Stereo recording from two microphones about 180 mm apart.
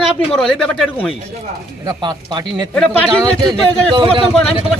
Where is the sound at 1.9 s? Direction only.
25° right (ahead or behind).